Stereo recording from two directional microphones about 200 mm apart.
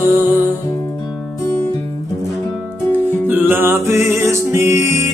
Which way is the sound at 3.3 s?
10° right (ahead or behind).